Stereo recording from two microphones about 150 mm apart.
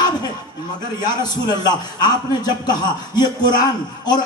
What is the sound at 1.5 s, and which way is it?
Speech, 30° left (ahead or behind).